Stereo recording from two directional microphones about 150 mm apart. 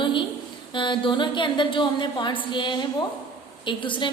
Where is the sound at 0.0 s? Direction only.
35° left (ahead or behind).